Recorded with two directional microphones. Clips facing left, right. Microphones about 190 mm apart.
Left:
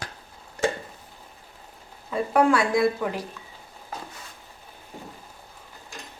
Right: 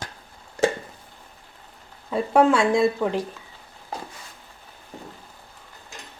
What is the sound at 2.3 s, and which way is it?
Speech, 25° right (ahead or behind).